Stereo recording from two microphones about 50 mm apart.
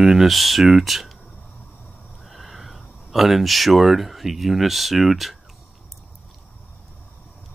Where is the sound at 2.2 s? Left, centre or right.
Centre.